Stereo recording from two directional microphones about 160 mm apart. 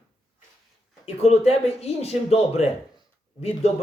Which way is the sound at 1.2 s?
40° left (ahead or behind).